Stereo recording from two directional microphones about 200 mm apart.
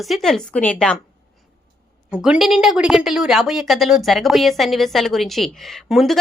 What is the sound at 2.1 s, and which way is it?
A woman's voice, 5° right (ahead or behind).